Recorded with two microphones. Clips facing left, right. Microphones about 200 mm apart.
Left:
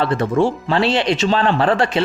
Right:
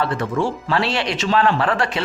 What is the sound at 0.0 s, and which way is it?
Speech, 25° left (ahead or behind).